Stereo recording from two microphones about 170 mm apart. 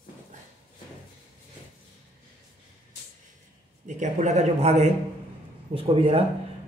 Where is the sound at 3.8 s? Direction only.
45° right (ahead or behind).